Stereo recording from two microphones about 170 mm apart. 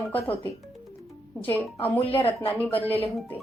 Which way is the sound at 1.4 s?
10° left (ahead or behind).